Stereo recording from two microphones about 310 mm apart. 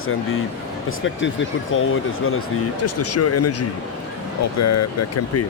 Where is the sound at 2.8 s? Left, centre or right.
Left.